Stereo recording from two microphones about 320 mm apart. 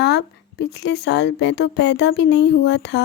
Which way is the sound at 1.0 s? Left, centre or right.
Left.